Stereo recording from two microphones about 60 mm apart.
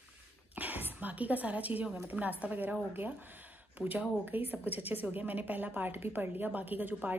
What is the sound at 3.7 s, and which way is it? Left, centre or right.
Speech, right.